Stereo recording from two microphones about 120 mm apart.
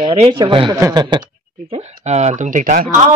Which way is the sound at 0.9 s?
35° right (ahead or behind).